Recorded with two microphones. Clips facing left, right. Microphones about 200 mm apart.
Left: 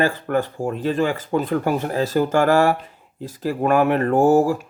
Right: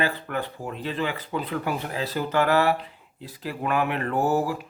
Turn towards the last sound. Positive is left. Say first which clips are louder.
# left 8 dB
turn(degrees=45)  # may be behind; listen again after turning